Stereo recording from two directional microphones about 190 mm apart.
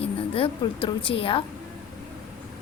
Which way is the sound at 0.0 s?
30° left (ahead or behind).